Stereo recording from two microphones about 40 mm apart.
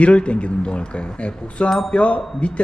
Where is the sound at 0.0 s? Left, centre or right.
Left.